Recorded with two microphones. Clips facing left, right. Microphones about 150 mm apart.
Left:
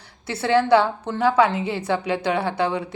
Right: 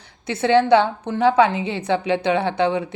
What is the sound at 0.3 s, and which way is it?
Speech, 20° right (ahead or behind).